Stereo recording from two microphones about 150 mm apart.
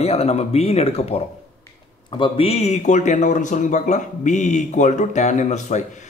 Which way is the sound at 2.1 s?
35° left (ahead or behind).